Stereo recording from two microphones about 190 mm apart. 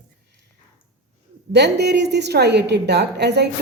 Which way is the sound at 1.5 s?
60° right (ahead or behind).